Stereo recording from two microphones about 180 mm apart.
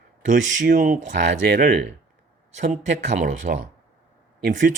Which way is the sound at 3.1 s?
45° right (ahead or behind).